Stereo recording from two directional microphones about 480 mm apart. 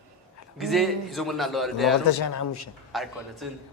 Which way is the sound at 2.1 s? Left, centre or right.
Left.